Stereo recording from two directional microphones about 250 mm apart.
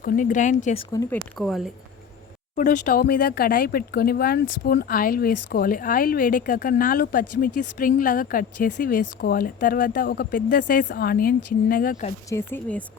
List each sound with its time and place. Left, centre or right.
0.0 s speech: left
1.4 s speech: centre
2.6 s speech: left
12.3 s speech: centre